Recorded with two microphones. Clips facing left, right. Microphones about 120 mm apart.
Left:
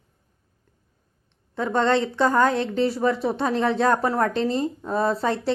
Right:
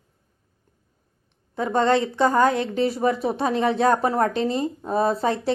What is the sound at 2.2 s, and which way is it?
A woman's voice, 25° right (ahead or behind).